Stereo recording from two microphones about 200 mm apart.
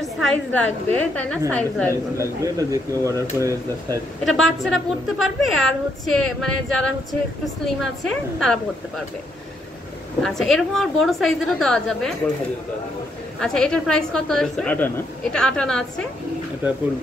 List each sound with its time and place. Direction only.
0.0 s a woman's voice: 5° left (ahead or behind)
2.4 s speech: 15° right (ahead or behind)
4.2 s a woman's voice: centre (ahead or behind)
10.2 s a woman's voice: centre (ahead or behind)
13.4 s a woman's voice: 5° left (ahead or behind)